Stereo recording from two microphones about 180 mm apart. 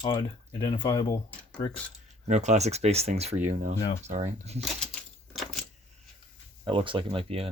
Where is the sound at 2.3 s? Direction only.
40° right (ahead or behind).